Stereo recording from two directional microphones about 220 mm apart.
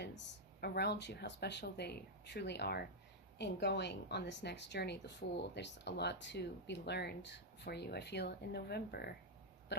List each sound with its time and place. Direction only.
0.6 s speech: 50° left (ahead or behind)